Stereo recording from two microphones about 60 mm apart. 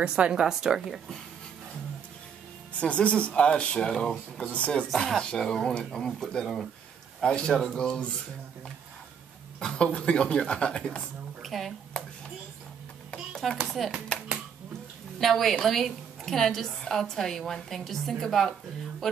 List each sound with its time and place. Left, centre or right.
0.0 s speech: centre
2.8 s speech: centre
4.8 s speech: centre
9.8 s speech: centre
11.4 s a woman's voice: centre
13.1 s a sound: centre
13.7 s a woman's voice: centre
15.1 s a woman's voice: centre